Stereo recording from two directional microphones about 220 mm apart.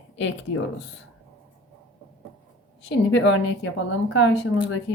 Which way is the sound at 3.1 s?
60° left (ahead or behind).